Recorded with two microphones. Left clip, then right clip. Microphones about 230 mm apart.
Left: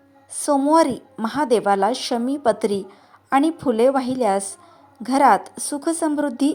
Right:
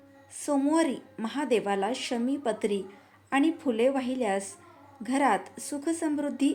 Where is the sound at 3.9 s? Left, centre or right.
Left.